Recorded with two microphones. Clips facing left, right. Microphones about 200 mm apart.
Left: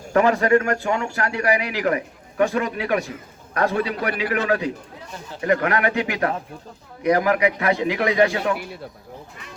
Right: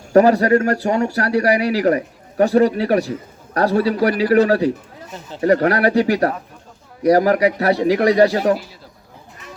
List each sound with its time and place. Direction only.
0.1 s speech: 35° right (ahead or behind)
8.5 s a man's voice: 60° left (ahead or behind)